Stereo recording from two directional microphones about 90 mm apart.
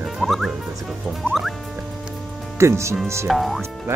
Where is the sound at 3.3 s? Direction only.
Centre (ahead or behind).